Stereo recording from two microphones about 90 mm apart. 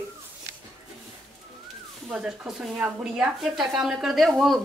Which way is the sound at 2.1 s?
5° right (ahead or behind).